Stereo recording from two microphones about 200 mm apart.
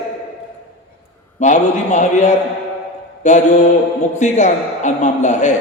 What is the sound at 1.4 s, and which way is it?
A man's voice, 35° left (ahead or behind).